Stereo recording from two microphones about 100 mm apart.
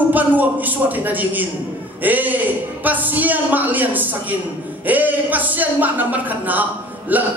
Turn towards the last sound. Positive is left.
turn(degrees=-15)  # may be behind; listen again after turning